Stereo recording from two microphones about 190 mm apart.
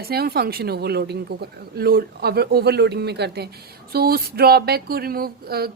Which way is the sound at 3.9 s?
55° right (ahead or behind).